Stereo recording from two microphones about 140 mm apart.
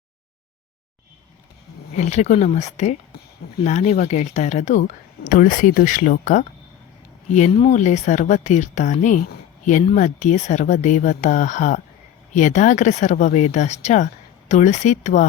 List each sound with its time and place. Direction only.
2.0 s speech: 55° left (ahead or behind)
5.3 s speech: 70° left (ahead or behind)
7.7 s speech: 55° left (ahead or behind)